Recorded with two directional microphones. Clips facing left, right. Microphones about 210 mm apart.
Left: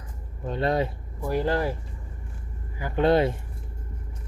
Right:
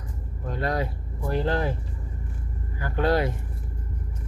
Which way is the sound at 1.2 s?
10° left (ahead or behind).